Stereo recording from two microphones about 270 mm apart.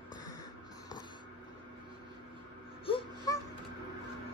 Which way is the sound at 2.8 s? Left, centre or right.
Centre.